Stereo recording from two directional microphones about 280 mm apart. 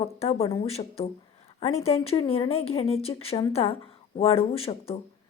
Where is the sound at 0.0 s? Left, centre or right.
Left.